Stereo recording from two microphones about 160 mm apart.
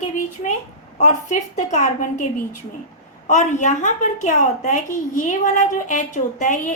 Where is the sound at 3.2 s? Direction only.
50° left (ahead or behind).